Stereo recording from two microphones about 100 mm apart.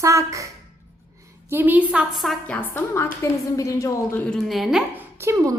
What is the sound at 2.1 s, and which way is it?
Speech, centre (ahead or behind).